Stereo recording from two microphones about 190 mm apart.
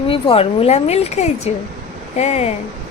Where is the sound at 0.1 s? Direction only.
30° left (ahead or behind).